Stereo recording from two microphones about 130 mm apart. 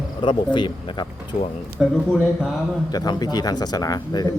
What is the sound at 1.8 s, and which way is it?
Speech, 5° right (ahead or behind).